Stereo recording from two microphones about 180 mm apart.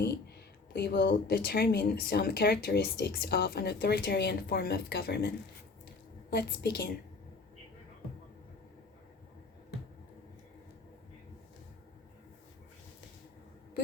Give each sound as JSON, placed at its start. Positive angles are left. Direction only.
{"t": 0.7, "sound": "speech", "side_deg": 60}
{"t": 6.3, "sound": "speech", "side_deg": 60}